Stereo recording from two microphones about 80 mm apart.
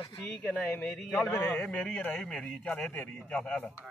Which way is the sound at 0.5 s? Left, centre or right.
Left.